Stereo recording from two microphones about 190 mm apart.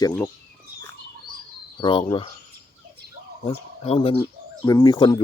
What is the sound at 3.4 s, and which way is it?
Speech, 30° left (ahead or behind).